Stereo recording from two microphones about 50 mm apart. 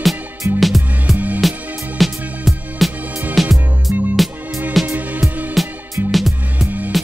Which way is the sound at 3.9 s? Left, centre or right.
Right.